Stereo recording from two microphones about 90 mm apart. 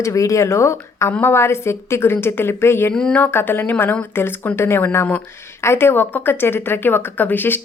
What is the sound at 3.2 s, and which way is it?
A woman's voice, 25° left (ahead or behind).